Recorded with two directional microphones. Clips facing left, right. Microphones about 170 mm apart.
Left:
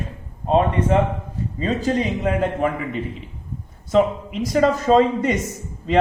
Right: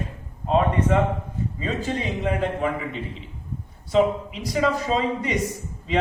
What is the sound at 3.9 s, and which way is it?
Speech, 45° left (ahead or behind).